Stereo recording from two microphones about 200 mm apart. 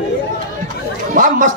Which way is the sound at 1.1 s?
40° right (ahead or behind).